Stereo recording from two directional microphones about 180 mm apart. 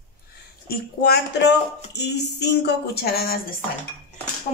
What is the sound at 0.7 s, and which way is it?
Speech, 60° left (ahead or behind).